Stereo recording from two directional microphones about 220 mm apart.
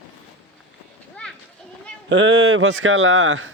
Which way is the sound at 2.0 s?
60° right (ahead or behind).